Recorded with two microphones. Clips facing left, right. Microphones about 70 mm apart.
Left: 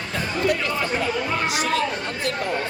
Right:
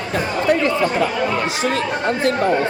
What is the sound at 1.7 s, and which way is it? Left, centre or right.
Speech, right.